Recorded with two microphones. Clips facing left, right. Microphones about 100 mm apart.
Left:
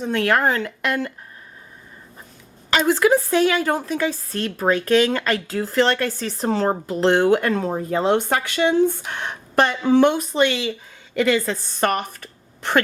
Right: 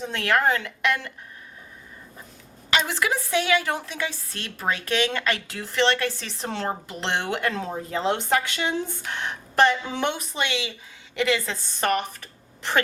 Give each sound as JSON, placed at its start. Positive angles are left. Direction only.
{"t": 0.1, "sound": "a woman's voice", "side_deg": 45}
{"t": 2.6, "sound": "a woman's voice", "side_deg": 40}